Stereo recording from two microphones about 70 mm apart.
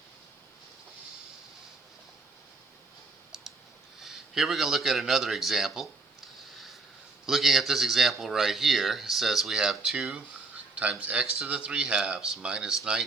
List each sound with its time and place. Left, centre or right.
3.3 s clicking: centre
4.0 s speech: centre
6.5 s a sound: centre
7.3 s speech: centre